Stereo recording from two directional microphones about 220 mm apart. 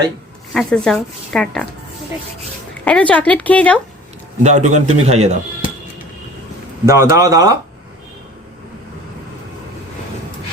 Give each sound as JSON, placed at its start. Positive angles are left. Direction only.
{"t": 0.5, "sound": "speech", "side_deg": 0}
{"t": 2.8, "sound": "speech", "side_deg": 5}
{"t": 4.4, "sound": "a man's voice", "side_deg": -35}
{"t": 6.8, "sound": "speech", "side_deg": -15}